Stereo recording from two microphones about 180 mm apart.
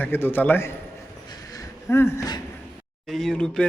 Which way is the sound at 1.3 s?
20° left (ahead or behind).